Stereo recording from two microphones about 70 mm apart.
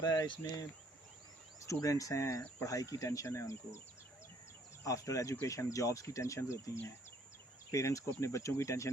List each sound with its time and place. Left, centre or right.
0.0 s speech: left
1.6 s speech: left
4.8 s speech: left